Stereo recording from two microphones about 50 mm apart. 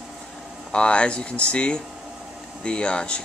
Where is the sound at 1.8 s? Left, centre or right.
Centre.